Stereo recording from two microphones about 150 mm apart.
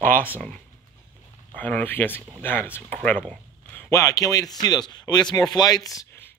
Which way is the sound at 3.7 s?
20° left (ahead or behind).